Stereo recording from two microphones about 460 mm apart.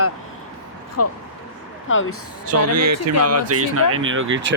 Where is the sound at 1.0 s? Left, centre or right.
Left.